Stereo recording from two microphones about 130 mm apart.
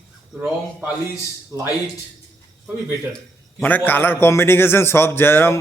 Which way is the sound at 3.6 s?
15° left (ahead or behind).